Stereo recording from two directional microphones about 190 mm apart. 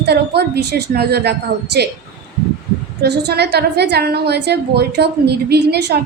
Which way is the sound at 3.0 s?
60° right (ahead or behind).